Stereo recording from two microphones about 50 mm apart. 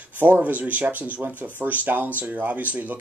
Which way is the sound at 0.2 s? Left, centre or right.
Right.